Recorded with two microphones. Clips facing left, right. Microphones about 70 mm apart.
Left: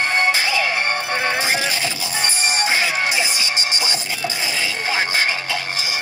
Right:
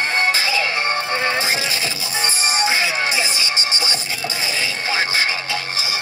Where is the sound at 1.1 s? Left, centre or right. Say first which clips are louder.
Even; centre.